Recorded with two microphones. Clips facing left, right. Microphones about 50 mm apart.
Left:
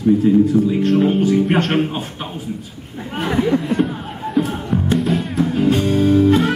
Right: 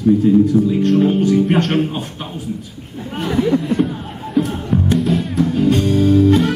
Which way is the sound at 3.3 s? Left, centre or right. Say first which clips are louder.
Right 1 dB; centre.